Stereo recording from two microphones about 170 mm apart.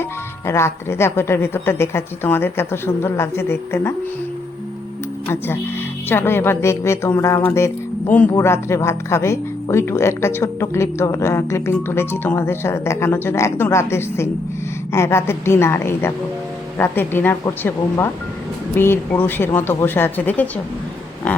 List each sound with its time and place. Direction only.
0.0 s speech: 15° left (ahead or behind)
6.1 s speech: 15° left (ahead or behind)